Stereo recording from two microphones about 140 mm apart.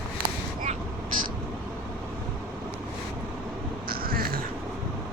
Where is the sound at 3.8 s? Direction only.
90° right.